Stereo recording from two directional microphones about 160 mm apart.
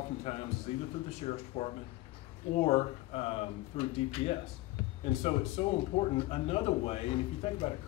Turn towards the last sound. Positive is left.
turn(degrees=35)  # may be behind; listen again after turning